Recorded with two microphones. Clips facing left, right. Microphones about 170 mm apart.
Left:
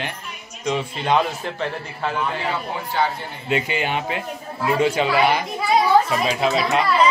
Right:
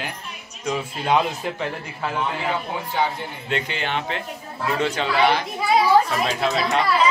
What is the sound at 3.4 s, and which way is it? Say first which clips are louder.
Speech: left 4 dB; 10° left (ahead or behind).